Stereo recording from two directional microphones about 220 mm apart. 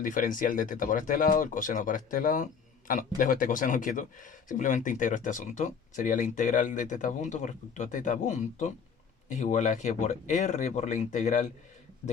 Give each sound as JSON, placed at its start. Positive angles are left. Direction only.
{"t": 0.0, "sound": "speech", "side_deg": 35}